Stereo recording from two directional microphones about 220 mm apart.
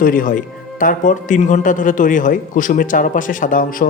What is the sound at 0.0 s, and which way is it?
A man's voice, 40° left (ahead or behind).